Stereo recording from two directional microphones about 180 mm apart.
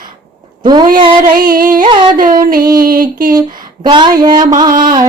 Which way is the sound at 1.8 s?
25° right (ahead or behind).